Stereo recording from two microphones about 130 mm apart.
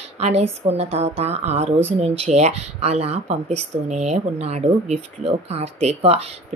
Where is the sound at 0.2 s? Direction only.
55° right (ahead or behind).